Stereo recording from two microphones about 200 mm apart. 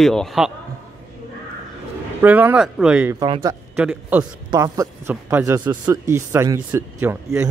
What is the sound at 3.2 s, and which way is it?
Speech, 20° right (ahead or behind).